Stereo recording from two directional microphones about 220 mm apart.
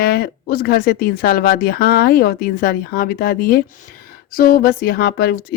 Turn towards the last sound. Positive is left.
turn(degrees=45)  # may be behind; listen again after turning